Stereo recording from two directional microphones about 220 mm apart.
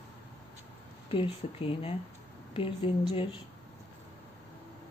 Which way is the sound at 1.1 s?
25° left (ahead or behind).